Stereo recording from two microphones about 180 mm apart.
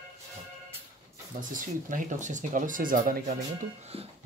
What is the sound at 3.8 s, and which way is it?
Speech, 35° right (ahead or behind).